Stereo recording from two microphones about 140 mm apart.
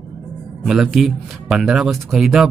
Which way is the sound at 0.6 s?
Centre (ahead or behind).